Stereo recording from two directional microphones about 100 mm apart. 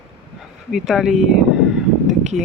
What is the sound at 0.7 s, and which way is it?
Speech, 5° right (ahead or behind).